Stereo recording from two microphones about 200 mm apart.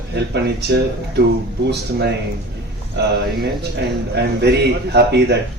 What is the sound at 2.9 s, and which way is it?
A man's voice, 55° right (ahead or behind).